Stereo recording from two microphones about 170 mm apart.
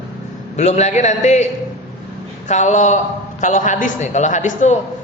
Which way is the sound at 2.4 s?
45° left (ahead or behind).